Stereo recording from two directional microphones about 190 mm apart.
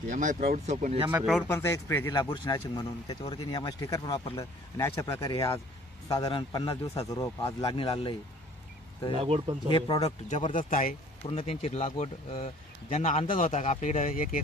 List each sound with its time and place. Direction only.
0.1 s speech: 40° right (ahead or behind)
0.7 s speech: 30° right (ahead or behind)
1.1 s speech: 5° right (ahead or behind)
1.5 s speech: 15° left (ahead or behind)
7.6 s speech: 30° left (ahead or behind)
9.1 s speech: 30° right (ahead or behind)
9.7 s speech: 25° left (ahead or behind)
10.7 s speech: 45° left (ahead or behind)
11.2 s speech: 30° left (ahead or behind)